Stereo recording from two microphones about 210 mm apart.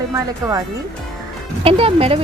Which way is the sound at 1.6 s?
25° right (ahead or behind).